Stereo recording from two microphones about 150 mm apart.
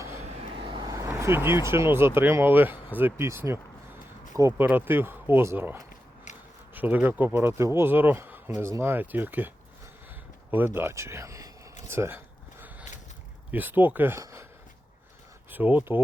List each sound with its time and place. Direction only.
0.3 s vehicle: 35° right (ahead or behind); by 1.6 s 15° right (ahead or behind)
1.7 s speech: 15° right (ahead or behind)
6.7 s speech: 10° right (ahead or behind)
10.8 s speech: 15° right (ahead or behind)
11.9 s a sound: 15° right (ahead or behind)
13.5 s speech: 10° right (ahead or behind)
15.4 s speech: 10° right (ahead or behind)